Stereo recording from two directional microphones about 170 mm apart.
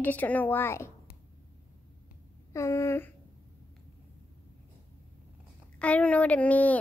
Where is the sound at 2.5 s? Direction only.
15° left (ahead or behind).